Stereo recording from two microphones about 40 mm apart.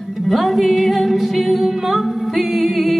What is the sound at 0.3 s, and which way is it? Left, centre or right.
Music, centre.